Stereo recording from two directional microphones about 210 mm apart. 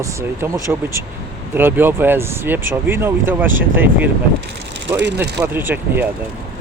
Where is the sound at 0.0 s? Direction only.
15° right (ahead or behind).